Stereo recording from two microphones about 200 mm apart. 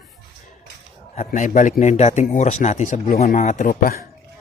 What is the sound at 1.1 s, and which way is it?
A man's voice, 35° left (ahead or behind).